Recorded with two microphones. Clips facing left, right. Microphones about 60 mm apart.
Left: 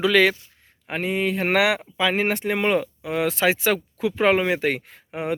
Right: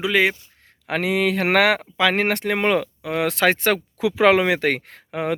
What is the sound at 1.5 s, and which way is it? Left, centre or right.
Speech, right.